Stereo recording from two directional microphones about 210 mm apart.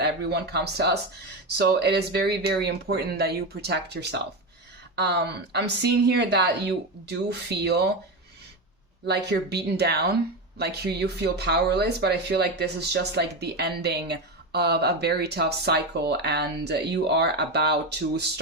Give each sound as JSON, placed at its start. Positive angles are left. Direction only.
{"t": 0.0, "sound": "speech", "side_deg": -50}
{"t": 9.0, "sound": "speech", "side_deg": -50}